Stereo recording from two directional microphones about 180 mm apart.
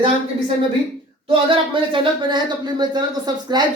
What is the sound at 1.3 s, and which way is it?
Speech, 30° right (ahead or behind).